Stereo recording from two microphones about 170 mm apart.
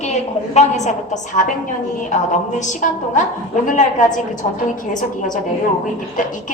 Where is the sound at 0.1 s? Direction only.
45° left (ahead or behind).